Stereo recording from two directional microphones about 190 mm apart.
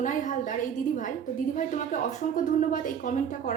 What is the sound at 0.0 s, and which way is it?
Speech, 40° left (ahead or behind).